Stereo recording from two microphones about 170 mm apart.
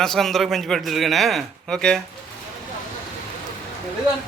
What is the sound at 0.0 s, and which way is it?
A man's voice, centre (ahead or behind).